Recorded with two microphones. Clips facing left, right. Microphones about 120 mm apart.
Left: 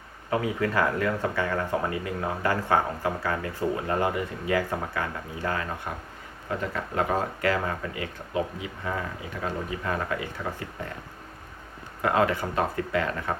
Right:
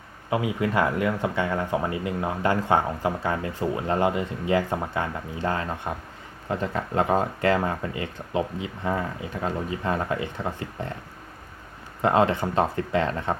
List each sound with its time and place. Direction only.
0.3 s speech: 15° right (ahead or behind)
12.0 s speech: 25° right (ahead or behind)